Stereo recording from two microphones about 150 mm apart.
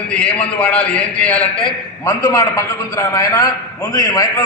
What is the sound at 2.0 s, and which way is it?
A man's voice, 20° left (ahead or behind).